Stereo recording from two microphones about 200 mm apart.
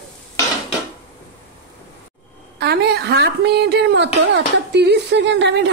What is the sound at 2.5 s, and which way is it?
Speech, 55° right (ahead or behind).